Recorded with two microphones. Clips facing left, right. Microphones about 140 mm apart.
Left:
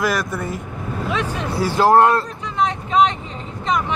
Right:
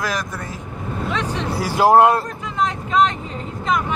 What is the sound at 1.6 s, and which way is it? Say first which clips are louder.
Speech: even; 10° right (ahead or behind).